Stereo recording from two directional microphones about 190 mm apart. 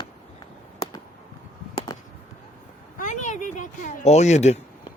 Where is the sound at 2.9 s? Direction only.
40° left (ahead or behind).